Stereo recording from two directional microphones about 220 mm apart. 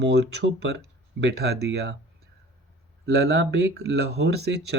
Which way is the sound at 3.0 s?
50° right (ahead or behind).